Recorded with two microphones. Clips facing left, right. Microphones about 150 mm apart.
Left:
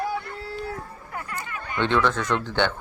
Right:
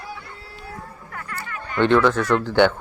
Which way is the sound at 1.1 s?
20° left (ahead or behind).